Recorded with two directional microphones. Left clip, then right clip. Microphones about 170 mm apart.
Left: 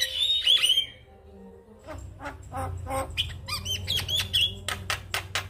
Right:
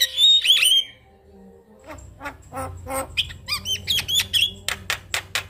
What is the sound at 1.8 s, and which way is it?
Squawk, 30° right (ahead or behind).